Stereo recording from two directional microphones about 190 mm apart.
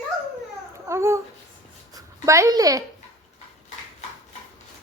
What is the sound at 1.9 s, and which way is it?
Speech, 15° right (ahead or behind).